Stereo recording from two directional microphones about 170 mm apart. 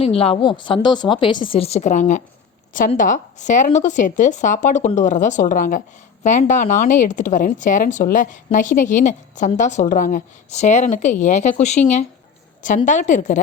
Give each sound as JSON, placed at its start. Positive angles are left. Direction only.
{"t": 0.0, "sound": "a woman's voice", "side_deg": 35}